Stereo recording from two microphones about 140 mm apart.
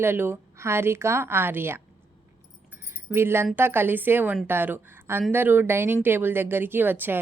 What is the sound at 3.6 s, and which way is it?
A woman's voice, 15° right (ahead or behind).